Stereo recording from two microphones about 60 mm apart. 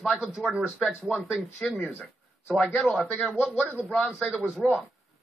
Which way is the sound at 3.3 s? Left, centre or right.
Centre.